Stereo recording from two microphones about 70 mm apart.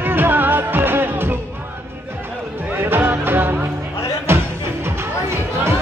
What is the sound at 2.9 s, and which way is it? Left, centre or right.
Music, right.